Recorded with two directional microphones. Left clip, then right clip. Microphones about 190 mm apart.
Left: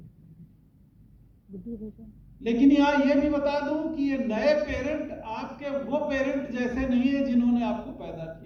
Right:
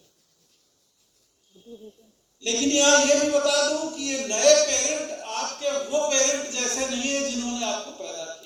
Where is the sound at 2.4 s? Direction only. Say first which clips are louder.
Even; 40° right (ahead or behind).